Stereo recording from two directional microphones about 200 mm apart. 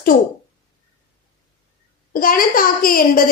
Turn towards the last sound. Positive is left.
turn(degrees=45)  # may be behind; listen again after turning